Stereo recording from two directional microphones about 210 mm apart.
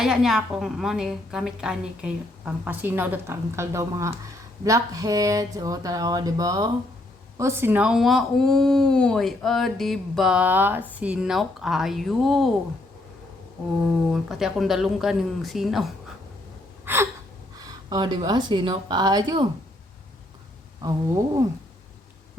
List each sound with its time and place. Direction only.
0.0 s speech: centre (ahead or behind)
14.1 s speech: centre (ahead or behind)
16.8 s gasp: 10° right (ahead or behind)
17.7 s speech: 20° right (ahead or behind)